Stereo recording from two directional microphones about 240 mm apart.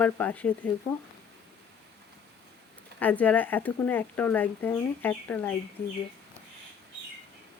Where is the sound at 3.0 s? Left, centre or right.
Centre.